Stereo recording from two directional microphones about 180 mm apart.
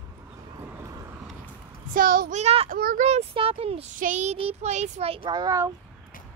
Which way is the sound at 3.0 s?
35° right (ahead or behind).